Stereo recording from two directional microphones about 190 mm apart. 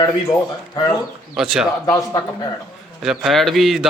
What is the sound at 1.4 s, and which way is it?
Speech, centre (ahead or behind).